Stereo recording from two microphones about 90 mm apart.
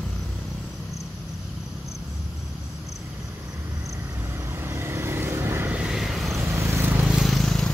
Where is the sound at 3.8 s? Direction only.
35° right (ahead or behind).